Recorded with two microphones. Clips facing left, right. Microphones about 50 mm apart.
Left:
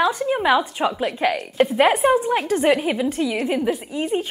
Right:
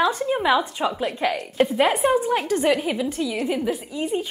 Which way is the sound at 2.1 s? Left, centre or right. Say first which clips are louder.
Left 2 dB; centre.